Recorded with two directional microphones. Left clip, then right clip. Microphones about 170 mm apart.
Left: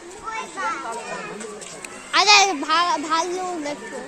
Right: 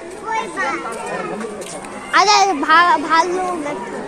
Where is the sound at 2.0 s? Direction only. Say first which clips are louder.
Right 3 dB; 35° left (ahead or behind).